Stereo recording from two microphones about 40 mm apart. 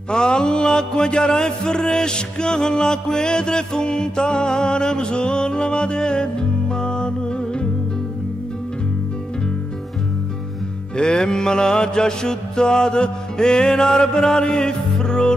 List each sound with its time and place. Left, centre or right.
0.1 s mantra: left
3.2 s music: left
11.0 s mantra: centre